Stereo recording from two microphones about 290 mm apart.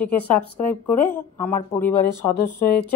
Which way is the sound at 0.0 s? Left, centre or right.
Centre.